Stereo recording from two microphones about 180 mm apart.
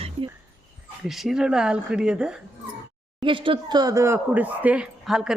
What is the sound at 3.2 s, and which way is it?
Speech, 30° right (ahead or behind).